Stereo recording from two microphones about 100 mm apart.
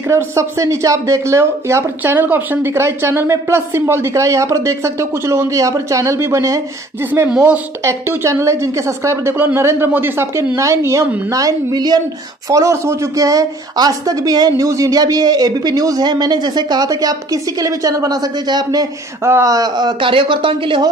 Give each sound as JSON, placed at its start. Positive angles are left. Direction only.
{"t": 0.1, "sound": "a woman's voice", "side_deg": -30}
{"t": 7.8, "sound": "speech", "side_deg": -30}